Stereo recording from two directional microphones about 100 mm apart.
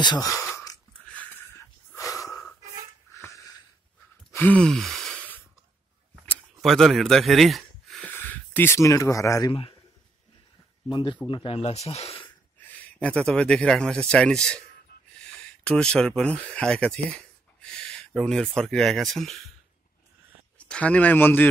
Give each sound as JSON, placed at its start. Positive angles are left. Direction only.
{"t": 0.2, "sound": "speech", "side_deg": 35}
{"t": 1.0, "sound": "a sound", "side_deg": 15}
{"t": 1.6, "sound": "snort", "side_deg": 30}
{"t": 3.2, "sound": "a sound", "side_deg": 30}
{"t": 4.3, "sound": "gasp", "side_deg": 15}
{"t": 6.6, "sound": "speech", "side_deg": 0}
{"t": 8.1, "sound": "a sound", "side_deg": 20}
{"t": 8.7, "sound": "speech", "side_deg": 30}
{"t": 9.5, "sound": "a man's voice", "side_deg": 65}
{"t": 10.9, "sound": "speech", "side_deg": 50}
{"t": 11.2, "sound": "speech", "side_deg": 60}
{"t": 12.6, "sound": "speech", "side_deg": 15}
{"t": 20.5, "sound": "speech", "side_deg": 10}